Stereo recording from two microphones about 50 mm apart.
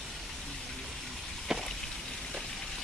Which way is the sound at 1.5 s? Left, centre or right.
Centre.